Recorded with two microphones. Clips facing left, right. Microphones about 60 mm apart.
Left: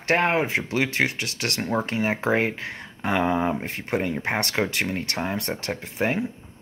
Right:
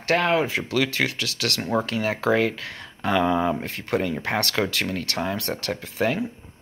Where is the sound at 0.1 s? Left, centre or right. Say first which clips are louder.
Even; left.